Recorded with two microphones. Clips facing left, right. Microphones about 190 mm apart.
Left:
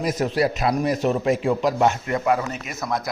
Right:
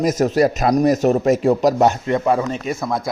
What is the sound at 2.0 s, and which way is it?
Speech, 25° right (ahead or behind).